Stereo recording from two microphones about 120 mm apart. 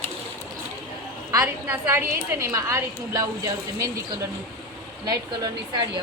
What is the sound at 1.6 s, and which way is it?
A woman's voice, 20° right (ahead or behind).